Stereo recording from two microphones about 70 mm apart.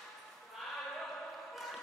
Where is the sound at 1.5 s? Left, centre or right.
Centre.